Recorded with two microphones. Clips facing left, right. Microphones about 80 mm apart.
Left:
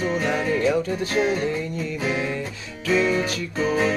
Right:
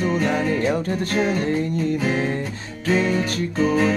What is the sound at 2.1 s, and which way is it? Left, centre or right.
Guitar, right.